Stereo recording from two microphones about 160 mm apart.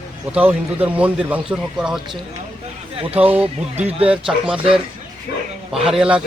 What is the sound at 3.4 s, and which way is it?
Speech, 40° right (ahead or behind).